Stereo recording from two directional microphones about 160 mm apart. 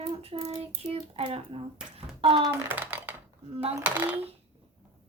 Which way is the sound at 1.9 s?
35° right (ahead or behind).